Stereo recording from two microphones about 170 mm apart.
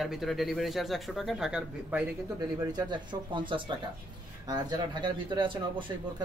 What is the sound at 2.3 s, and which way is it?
Speech, 25° right (ahead or behind).